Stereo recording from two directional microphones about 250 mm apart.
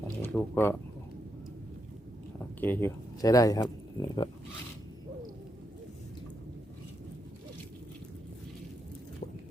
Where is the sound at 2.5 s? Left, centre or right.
Centre.